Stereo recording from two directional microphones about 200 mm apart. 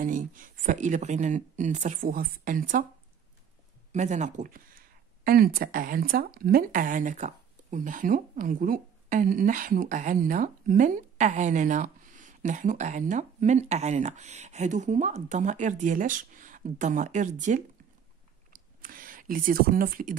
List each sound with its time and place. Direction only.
0.0 s speech: 40° right (ahead or behind)
3.9 s speech: 35° right (ahead or behind)
18.5 s a sound: 45° right (ahead or behind)